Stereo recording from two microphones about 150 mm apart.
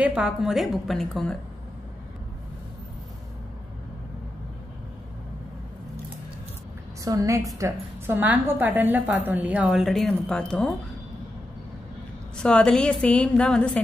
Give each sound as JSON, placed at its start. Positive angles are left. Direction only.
{"t": 0.0, "sound": "a woman's voice", "side_deg": -5}
{"t": 7.1, "sound": "a woman's voice", "side_deg": -20}
{"t": 12.4, "sound": "a woman's voice", "side_deg": 5}